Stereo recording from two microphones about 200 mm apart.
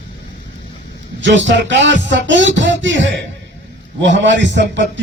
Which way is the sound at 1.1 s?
65° right (ahead or behind).